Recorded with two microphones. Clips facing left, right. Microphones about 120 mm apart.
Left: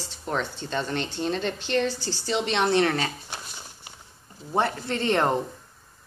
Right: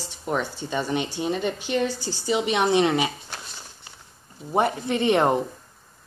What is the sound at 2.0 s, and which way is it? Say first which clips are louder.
Speech: right 1 dB; 50° right (ahead or behind).